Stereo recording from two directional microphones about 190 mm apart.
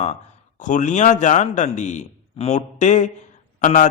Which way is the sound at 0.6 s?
40° left (ahead or behind).